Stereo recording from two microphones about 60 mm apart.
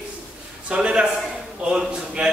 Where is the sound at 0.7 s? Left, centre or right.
Centre.